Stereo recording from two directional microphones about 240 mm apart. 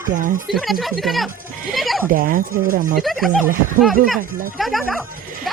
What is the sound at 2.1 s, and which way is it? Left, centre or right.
Speech, right.